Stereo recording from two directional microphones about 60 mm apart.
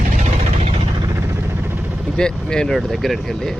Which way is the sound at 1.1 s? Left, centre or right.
Right.